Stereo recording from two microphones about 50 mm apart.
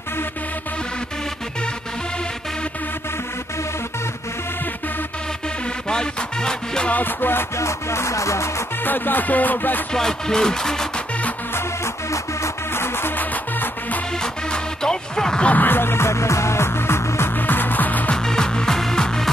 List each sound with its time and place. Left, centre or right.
5.9 s music: centre
6.9 s music: left
7.5 s music: left
8.8 s music: left
9.9 s speech: centre
11.5 s music: left
12.7 s music: left
13.1 s music: left
14.1 s music: centre
15.4 s music: left
17.3 s music: left
18.1 s music: centre